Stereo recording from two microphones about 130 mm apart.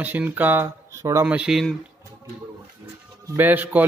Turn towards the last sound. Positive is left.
turn(degrees=-15)  # may be behind; listen again after turning